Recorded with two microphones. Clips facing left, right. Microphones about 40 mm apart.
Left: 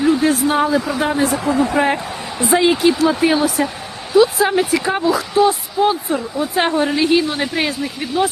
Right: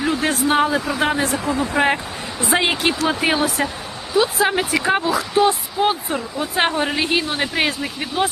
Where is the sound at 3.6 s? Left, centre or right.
Right.